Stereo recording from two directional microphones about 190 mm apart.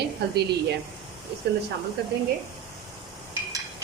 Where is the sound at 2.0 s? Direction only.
60° right (ahead or behind).